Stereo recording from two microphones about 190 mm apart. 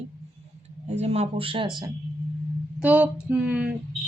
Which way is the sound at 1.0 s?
35° right (ahead or behind).